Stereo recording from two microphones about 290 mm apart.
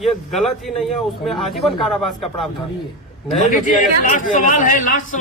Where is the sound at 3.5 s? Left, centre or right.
Left.